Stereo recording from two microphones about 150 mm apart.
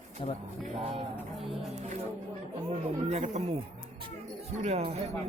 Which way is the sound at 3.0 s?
50° right (ahead or behind).